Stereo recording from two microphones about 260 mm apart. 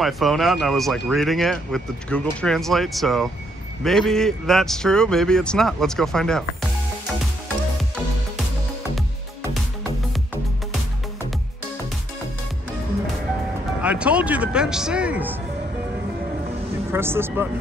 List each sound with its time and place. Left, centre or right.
0.0 s speech: centre
13.8 s speech: centre
16.9 s speech: centre